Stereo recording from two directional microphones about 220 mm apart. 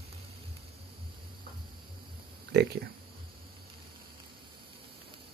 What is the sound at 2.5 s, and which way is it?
Speech, 50° right (ahead or behind).